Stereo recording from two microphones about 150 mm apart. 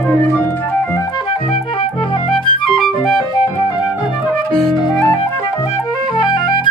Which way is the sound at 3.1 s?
25° left (ahead or behind).